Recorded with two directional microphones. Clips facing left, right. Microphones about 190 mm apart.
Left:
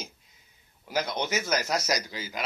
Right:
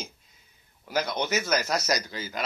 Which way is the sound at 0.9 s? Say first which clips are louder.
Right 2 dB; 15° left (ahead or behind).